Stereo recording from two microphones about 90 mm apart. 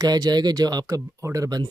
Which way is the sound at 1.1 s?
35° right (ahead or behind).